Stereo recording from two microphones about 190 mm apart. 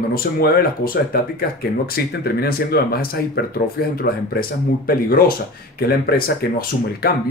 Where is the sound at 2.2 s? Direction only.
55° left (ahead or behind).